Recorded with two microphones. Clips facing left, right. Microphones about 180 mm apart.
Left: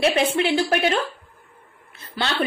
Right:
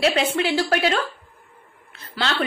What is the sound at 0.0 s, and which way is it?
A woman's voice, 25° left (ahead or behind).